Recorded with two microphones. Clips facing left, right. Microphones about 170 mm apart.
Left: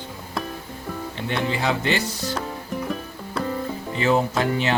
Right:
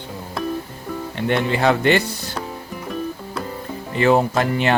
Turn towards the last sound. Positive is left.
turn(degrees=-60)  # may be behind; listen again after turning